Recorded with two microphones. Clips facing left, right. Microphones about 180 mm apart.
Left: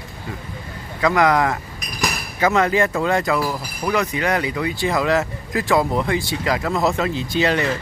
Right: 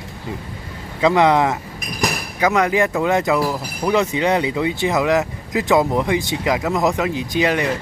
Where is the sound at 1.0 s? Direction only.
25° right (ahead or behind).